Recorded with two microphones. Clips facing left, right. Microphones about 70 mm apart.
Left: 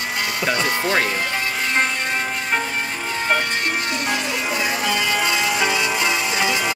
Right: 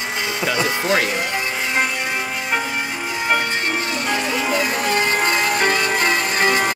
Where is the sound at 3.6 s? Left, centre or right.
Right.